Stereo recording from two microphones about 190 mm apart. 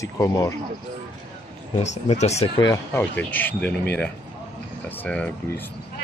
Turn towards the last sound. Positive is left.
turn(degrees=10)  # may be behind; listen again after turning